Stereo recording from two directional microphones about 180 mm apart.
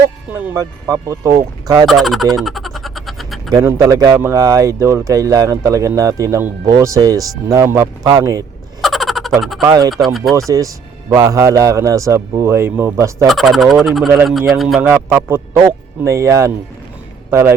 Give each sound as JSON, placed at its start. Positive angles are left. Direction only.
{"t": 0.3, "sound": "speech", "side_deg": -10}
{"t": 1.9, "sound": "speech", "side_deg": 0}
{"t": 2.4, "sound": "goat", "side_deg": 0}
{"t": 3.5, "sound": "speech", "side_deg": -15}
{"t": 8.8, "sound": "frog", "side_deg": 0}
{"t": 9.6, "sound": "speech", "side_deg": -20}
{"t": 9.9, "sound": "speech", "side_deg": 0}
{"t": 11.1, "sound": "speech", "side_deg": -20}
{"t": 13.2, "sound": "speech", "side_deg": 0}
{"t": 14.8, "sound": "speech", "side_deg": -10}